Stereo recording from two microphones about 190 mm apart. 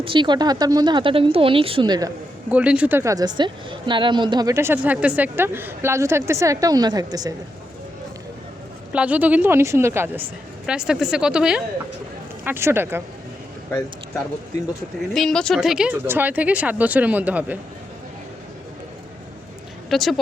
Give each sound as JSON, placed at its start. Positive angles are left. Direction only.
{"t": 0.0, "sound": "speech", "side_deg": -25}
{"t": 2.5, "sound": "a woman's voice", "side_deg": -5}
{"t": 8.9, "sound": "a woman's voice", "side_deg": -5}
{"t": 15.1, "sound": "a woman's voice", "side_deg": 5}
{"t": 19.9, "sound": "speech", "side_deg": 0}